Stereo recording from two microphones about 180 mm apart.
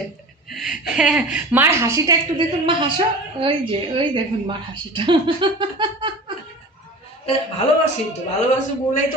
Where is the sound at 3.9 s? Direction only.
25° right (ahead or behind).